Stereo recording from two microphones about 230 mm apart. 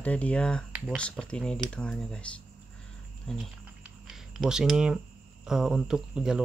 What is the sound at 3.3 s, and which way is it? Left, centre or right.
Speech, centre.